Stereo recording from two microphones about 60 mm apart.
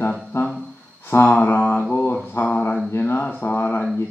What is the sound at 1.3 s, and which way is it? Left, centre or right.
Mantra, left.